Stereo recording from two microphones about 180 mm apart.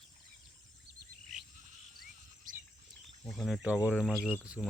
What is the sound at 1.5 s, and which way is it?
Sheep, 45° right (ahead or behind).